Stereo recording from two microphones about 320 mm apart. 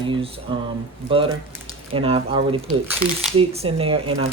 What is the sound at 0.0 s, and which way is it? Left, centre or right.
Speech, centre.